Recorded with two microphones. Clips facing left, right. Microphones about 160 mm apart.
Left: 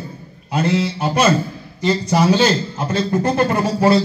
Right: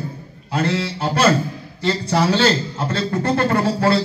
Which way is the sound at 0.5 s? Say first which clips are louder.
Left 3 dB; 15° left (ahead or behind).